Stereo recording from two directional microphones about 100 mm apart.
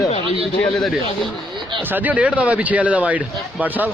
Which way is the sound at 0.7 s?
Centre (ahead or behind).